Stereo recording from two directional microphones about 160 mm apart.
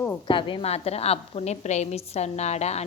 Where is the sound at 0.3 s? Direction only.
30° left (ahead or behind).